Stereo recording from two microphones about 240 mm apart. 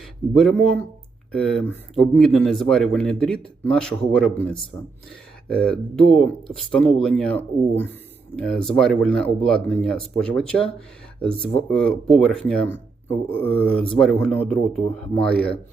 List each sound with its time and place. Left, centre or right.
0.0 s speech: centre
5.5 s speech: centre